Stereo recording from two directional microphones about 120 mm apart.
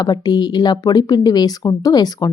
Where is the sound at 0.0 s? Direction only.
35° left (ahead or behind).